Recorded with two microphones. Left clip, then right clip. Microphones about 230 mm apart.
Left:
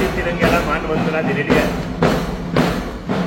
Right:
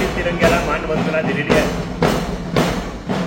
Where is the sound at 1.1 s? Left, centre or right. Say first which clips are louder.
Right 1 dB; right.